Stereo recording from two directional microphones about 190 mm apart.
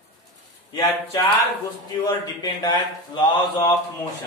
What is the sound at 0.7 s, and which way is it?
Speech, 15° left (ahead or behind).